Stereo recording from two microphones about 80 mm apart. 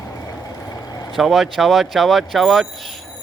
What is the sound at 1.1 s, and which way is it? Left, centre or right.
Speech, centre.